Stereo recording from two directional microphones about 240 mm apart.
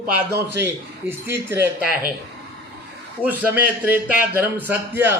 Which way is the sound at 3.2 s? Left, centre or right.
Centre.